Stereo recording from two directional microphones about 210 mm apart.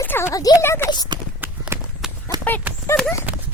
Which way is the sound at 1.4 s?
10° right (ahead or behind).